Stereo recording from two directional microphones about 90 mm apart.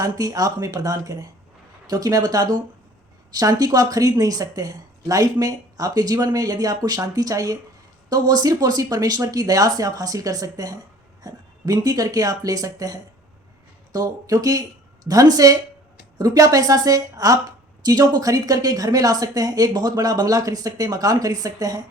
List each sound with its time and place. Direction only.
0.0 s speech: 40° right (ahead or behind)